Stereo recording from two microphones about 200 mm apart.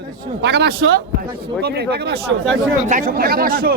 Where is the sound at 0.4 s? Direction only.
55° right (ahead or behind).